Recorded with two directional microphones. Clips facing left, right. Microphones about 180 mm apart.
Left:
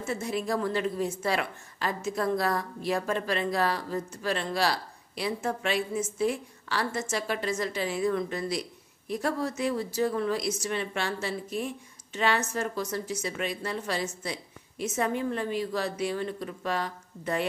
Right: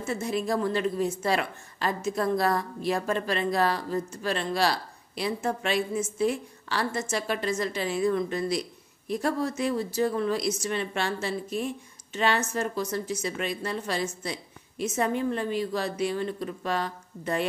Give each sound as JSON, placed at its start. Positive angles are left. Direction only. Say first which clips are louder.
{"t": 0.2, "sound": "speech", "louder": "right 3 dB", "side_deg": -25}
{"t": 15.3, "sound": "speech", "louder": "right 1 dB", "side_deg": -25}